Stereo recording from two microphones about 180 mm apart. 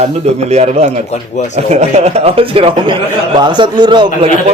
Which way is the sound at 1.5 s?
40° right (ahead or behind).